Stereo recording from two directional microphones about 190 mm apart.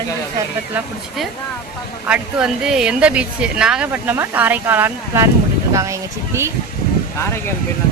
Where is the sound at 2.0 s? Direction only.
5° right (ahead or behind).